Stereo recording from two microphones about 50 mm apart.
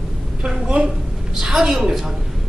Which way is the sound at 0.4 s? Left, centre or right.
Right.